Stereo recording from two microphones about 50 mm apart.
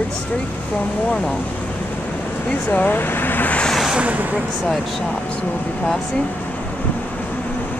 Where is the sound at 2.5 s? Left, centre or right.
Left.